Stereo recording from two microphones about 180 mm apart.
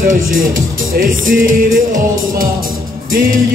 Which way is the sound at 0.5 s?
50° right (ahead or behind).